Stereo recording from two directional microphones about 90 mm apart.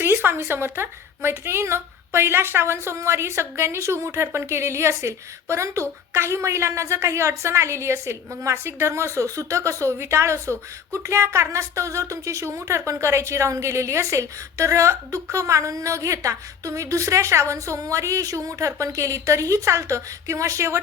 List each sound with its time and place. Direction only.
0.0 s a woman's voice: 25° right (ahead or behind)